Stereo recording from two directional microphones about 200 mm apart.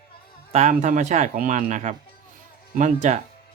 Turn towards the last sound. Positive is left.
turn(degrees=-35)  # may be behind; listen again after turning